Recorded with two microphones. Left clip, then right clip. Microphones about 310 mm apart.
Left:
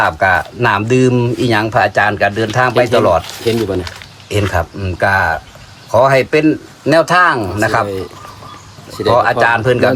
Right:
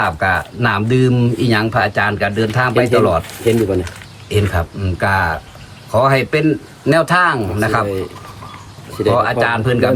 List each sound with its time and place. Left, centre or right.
0.0 s speech: centre
4.3 s speech: centre
9.1 s speech: centre